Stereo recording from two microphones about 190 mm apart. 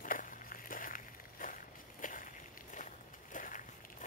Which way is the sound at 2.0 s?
45° left (ahead or behind).